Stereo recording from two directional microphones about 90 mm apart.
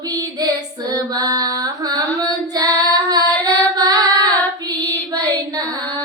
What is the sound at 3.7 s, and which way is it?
Female singing, 45° right (ahead or behind).